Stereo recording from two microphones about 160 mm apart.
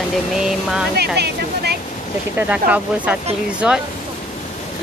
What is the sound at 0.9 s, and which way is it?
Speech, 90° right.